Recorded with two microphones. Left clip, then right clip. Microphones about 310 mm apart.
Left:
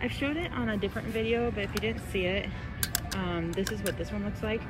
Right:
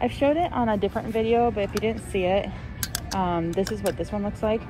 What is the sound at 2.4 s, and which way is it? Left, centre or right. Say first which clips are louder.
Typing: right 7 dB; right.